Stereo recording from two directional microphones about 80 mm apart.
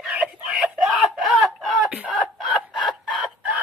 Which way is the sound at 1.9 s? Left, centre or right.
Centre.